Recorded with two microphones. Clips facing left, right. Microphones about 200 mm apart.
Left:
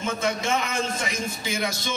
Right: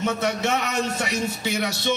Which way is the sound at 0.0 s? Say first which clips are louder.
Right 3 dB; 70° right (ahead or behind).